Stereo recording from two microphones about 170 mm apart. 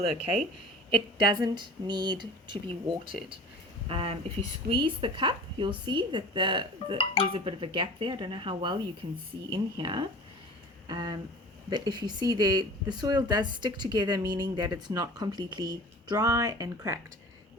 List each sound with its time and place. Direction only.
0.9 s speech: 25° right (ahead or behind)
7.0 s speech: 30° left (ahead or behind)
7.3 s speech: 30° right (ahead or behind)
10.8 s a sound: 25° right (ahead or behind)
11.7 s speech: 25° right (ahead or behind)